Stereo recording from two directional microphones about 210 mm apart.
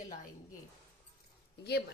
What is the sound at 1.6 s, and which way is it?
Speech, 50° left (ahead or behind).